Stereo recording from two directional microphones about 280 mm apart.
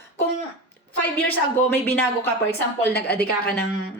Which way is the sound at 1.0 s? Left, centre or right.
Centre.